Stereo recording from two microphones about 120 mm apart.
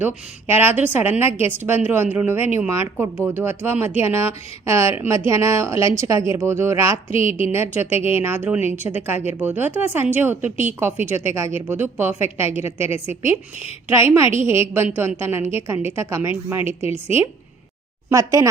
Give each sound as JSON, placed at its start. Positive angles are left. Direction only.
{"t": 0.0, "sound": "speech", "side_deg": -20}